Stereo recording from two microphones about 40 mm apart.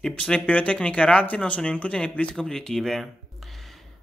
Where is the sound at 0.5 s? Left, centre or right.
Left.